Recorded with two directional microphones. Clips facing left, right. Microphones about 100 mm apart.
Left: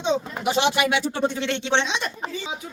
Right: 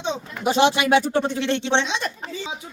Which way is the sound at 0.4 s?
35° right (ahead or behind).